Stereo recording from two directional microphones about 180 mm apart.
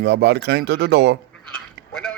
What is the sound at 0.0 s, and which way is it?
Speech, 70° right (ahead or behind).